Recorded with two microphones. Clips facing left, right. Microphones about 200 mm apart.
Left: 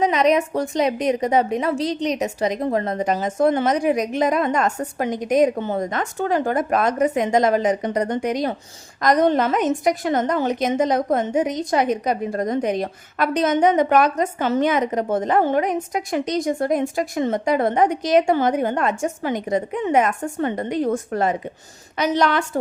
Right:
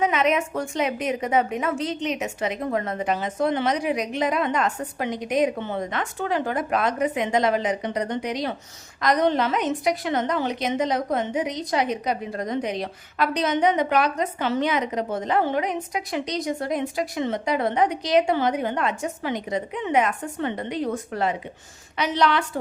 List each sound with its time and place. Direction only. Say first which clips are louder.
0.0 s a woman's voice: left 4 dB; 35° left (ahead or behind)